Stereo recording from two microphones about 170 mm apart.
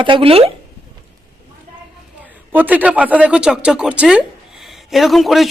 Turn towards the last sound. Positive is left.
turn(degrees=0)  # may be behind; listen again after turning